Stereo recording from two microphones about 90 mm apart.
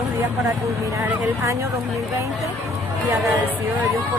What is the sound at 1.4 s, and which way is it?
Speech, 35° right (ahead or behind).